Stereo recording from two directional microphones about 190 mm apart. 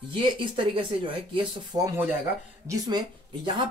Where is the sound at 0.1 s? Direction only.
25° right (ahead or behind).